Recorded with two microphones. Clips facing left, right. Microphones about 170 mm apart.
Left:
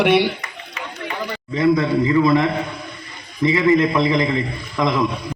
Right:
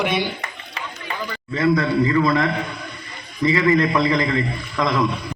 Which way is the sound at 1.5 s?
20° left (ahead or behind).